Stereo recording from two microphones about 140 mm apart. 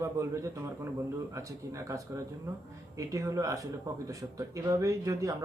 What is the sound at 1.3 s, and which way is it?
Speech, 20° right (ahead or behind).